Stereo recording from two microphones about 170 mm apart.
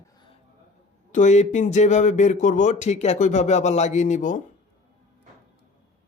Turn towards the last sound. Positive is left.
turn(degrees=50)  # may be behind; listen again after turning